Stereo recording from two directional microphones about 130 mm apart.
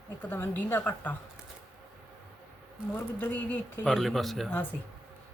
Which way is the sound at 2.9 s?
15° left (ahead or behind).